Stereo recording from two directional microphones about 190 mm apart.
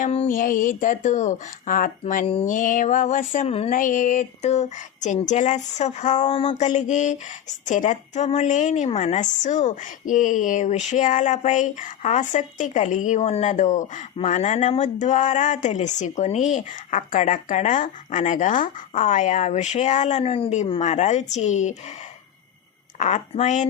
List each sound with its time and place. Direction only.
0.0 s speech: 40° left (ahead or behind)
3.7 s a woman's voice: 45° left (ahead or behind)
23.0 s a woman's voice: 40° left (ahead or behind)